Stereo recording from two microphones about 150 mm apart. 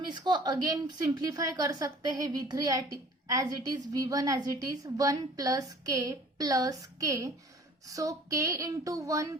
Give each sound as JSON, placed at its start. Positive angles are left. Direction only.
{"t": 0.3, "sound": "a woman's voice", "side_deg": -30}